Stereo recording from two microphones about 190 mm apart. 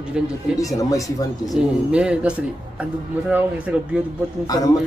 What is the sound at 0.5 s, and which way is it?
Speech, 15° left (ahead or behind).